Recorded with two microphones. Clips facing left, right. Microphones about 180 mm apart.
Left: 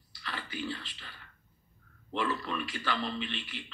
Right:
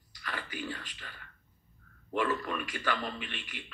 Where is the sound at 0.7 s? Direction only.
45° right (ahead or behind).